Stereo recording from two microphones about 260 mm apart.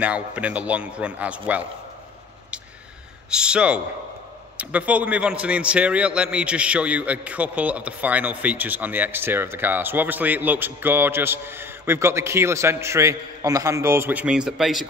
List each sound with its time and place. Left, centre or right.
0.0 s a man's voice: centre
3.3 s a man's voice: centre